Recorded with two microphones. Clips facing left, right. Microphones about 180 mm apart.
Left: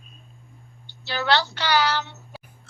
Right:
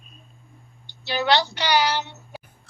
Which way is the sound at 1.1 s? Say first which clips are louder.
Right 2 dB; 15° right (ahead or behind).